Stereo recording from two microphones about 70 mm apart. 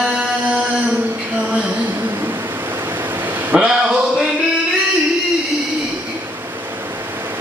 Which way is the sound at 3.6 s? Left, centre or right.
Centre.